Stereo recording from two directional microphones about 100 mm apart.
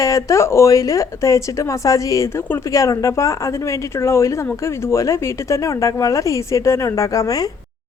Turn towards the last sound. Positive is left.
turn(degrees=35)  # may be behind; listen again after turning